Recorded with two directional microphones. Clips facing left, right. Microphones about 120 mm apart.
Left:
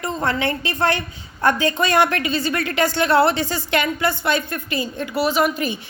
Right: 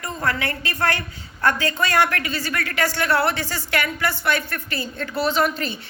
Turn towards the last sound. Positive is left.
turn(degrees=15)  # may be behind; listen again after turning